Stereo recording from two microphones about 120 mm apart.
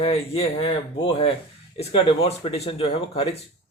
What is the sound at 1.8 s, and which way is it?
Speech, 50° left (ahead or behind).